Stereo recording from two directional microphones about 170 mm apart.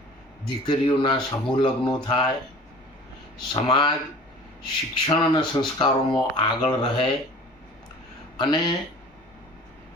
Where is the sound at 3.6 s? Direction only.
25° left (ahead or behind).